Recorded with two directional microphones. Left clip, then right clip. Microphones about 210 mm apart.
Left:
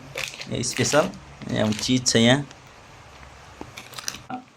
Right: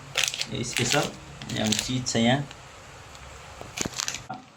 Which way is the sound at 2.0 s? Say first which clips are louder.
Left 6 dB; 50° left (ahead or behind).